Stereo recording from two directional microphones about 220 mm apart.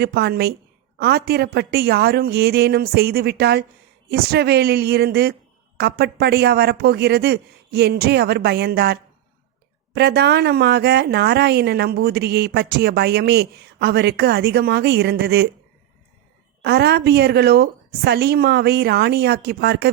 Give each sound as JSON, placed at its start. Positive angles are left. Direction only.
{"t": 0.0, "sound": "a woman's voice", "side_deg": -45}
{"t": 16.6, "sound": "a woman's voice", "side_deg": -50}